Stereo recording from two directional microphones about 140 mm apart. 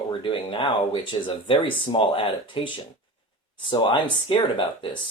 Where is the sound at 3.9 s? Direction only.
35° left (ahead or behind).